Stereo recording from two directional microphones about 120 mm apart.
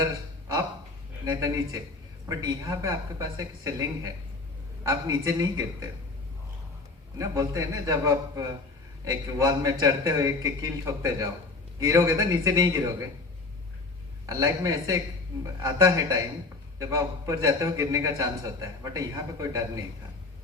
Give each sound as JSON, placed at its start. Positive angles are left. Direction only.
{"t": 1.2, "sound": "a man's voice", "side_deg": -30}
{"t": 7.2, "sound": "a man's voice", "side_deg": -25}
{"t": 14.3, "sound": "a man's voice", "side_deg": -30}